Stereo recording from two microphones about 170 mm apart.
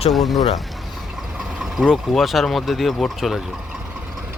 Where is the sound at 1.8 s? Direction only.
Centre (ahead or behind).